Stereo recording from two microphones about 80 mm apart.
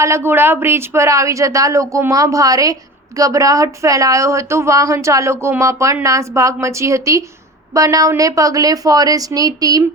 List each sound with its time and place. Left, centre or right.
0.0 s a woman's voice: right